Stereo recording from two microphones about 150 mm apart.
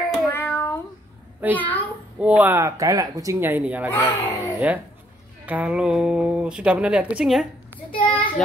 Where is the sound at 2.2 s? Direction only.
10° right (ahead or behind).